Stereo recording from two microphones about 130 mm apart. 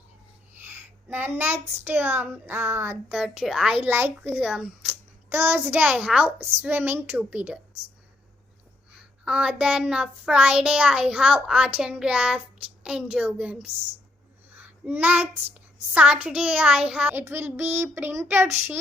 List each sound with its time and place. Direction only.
0.7 s a child's voice: 15° right (ahead or behind)
3.8 s a child's voice: 15° right (ahead or behind)
9.0 s a child's voice: 5° right (ahead or behind)
14.5 s child singing: 15° right (ahead or behind)
15.9 s a child's voice: 10° right (ahead or behind)